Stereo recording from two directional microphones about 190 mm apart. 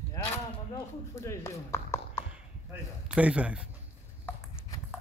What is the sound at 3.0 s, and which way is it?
Speech, 5° right (ahead or behind).